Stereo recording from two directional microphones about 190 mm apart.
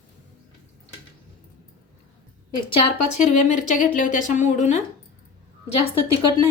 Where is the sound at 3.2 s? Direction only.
40° left (ahead or behind).